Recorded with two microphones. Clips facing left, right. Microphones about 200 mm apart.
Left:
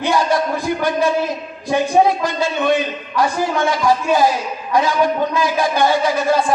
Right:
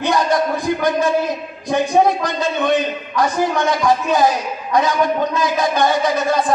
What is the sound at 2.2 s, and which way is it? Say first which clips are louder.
A man's voice: left 1 dB; 20° right (ahead or behind).